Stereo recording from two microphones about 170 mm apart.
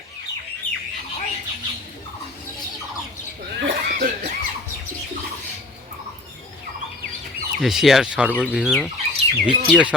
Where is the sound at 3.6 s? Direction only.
65° right (ahead or behind).